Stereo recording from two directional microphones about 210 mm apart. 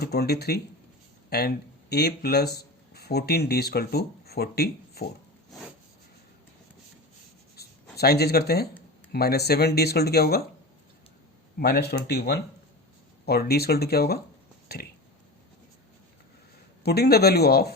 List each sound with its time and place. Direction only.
0.0 s speech: 50° left (ahead or behind)
7.9 s speech: 50° left (ahead or behind)
11.6 s speech: 50° left (ahead or behind)
16.8 s speech: 50° left (ahead or behind)